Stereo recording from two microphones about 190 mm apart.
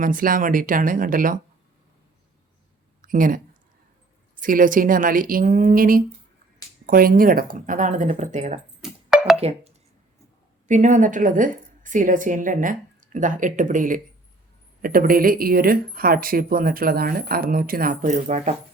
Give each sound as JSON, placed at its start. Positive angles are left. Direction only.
{"t": 0.0, "sound": "speech", "side_deg": -45}
{"t": 3.0, "sound": "a woman's voice", "side_deg": -45}
{"t": 8.8, "sound": "music", "side_deg": 0}
{"t": 10.7, "sound": "speech", "side_deg": -40}